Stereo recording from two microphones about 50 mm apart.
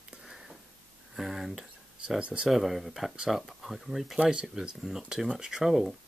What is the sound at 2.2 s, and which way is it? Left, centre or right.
Speech, right.